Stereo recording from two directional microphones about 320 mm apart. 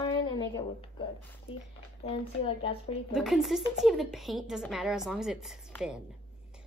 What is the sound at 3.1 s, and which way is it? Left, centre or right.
A woman's voice, centre.